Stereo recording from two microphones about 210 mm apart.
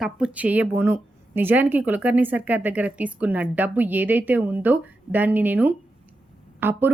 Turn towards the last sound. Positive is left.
turn(degrees=-10)  # may be behind; listen again after turning